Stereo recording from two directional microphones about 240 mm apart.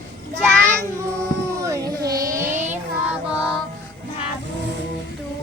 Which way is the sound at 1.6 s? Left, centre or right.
Centre.